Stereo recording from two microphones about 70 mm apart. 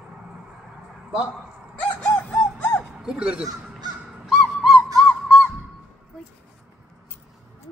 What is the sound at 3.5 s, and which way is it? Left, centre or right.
Crow, right.